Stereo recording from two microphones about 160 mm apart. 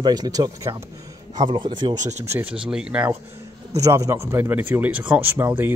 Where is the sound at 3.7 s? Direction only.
20° right (ahead or behind).